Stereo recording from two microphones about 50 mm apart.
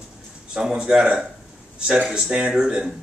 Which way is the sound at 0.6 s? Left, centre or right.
Centre.